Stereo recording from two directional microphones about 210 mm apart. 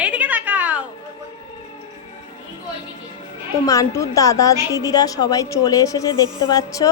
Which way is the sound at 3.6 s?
15° left (ahead or behind).